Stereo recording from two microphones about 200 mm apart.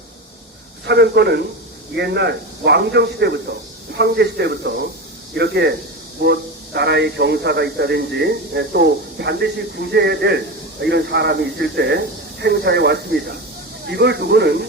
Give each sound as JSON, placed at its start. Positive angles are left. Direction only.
{"t": 0.9, "sound": "a man's voice", "side_deg": -55}